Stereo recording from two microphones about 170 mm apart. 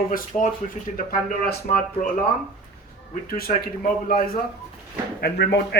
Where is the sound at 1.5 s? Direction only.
60° left (ahead or behind).